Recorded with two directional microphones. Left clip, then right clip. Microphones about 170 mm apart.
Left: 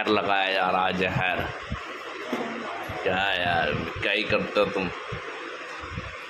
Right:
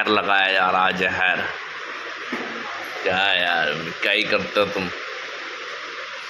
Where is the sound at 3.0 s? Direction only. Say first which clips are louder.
Right 5 dB; centre (ahead or behind).